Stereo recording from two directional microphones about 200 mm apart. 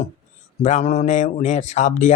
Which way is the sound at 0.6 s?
35° left (ahead or behind).